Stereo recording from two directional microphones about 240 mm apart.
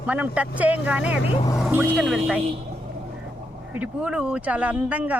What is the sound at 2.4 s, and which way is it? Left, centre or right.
Speech, right.